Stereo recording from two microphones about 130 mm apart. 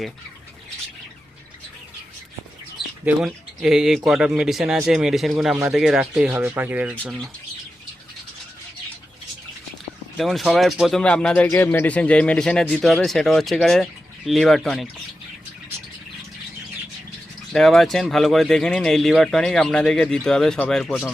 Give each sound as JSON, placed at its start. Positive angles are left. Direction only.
{"t": 3.2, "sound": "speech", "side_deg": -5}
{"t": 7.0, "sound": "speech", "side_deg": -5}
{"t": 10.2, "sound": "speech", "side_deg": 0}
{"t": 17.5, "sound": "speech", "side_deg": 0}